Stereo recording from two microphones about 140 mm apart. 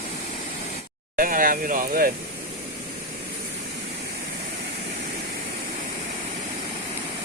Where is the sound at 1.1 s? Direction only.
80° right.